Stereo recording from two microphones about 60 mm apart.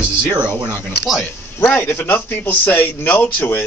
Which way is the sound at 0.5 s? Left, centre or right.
Right.